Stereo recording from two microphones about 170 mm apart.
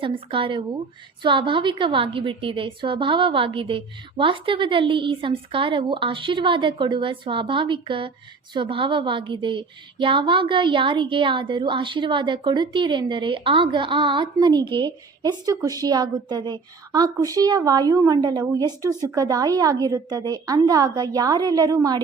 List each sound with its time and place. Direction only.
0.0 s a woman's voice: 30° right (ahead or behind)